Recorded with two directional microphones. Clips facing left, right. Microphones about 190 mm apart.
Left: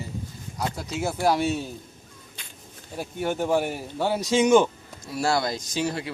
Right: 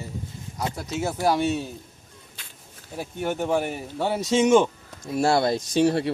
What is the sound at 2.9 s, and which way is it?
Speech, centre (ahead or behind).